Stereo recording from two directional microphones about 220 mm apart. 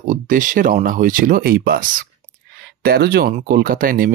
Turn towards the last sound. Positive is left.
turn(degrees=-40)  # may be behind; listen again after turning